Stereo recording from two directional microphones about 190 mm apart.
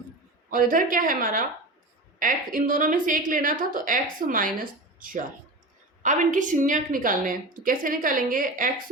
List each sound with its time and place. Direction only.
0.5 s a woman's voice: 45° right (ahead or behind)